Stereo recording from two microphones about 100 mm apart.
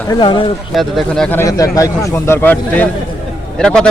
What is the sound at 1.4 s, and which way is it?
A man's voice, 35° left (ahead or behind).